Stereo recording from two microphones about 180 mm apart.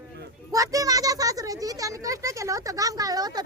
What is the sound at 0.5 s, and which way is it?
Speech, 20° right (ahead or behind).